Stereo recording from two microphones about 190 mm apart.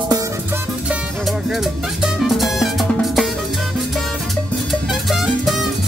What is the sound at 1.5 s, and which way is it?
Music, centre (ahead or behind).